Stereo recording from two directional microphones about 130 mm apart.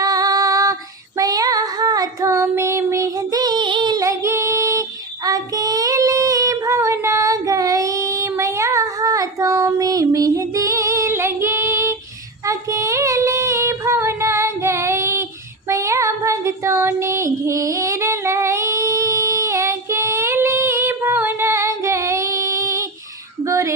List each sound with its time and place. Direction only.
0.0 s female singing: 30° right (ahead or behind)
12.5 s child singing: 25° right (ahead or behind)
23.4 s a sound: 25° right (ahead or behind)